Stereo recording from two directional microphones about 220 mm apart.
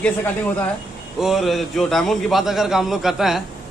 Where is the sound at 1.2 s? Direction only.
Centre (ahead or behind).